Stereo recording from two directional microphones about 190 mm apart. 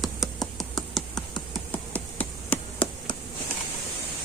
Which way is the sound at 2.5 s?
10° left (ahead or behind).